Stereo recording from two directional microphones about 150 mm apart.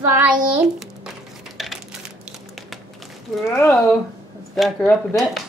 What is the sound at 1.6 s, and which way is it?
Crushing, centre (ahead or behind).